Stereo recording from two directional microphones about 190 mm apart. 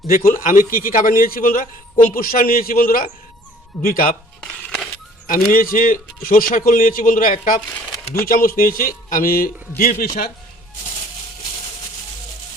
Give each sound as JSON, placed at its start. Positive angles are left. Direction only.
{"t": 0.1, "sound": "a man's voice", "side_deg": 50}
{"t": 4.4, "sound": "a sound", "side_deg": 5}
{"t": 5.3, "sound": "a man's voice", "side_deg": 45}